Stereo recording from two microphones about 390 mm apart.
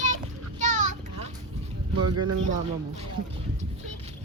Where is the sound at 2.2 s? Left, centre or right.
Centre.